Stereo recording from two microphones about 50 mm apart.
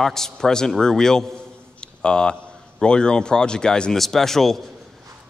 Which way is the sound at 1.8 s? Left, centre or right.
Centre.